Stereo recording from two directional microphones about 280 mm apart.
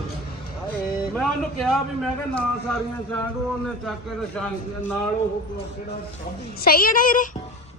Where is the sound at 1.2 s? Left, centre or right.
Centre.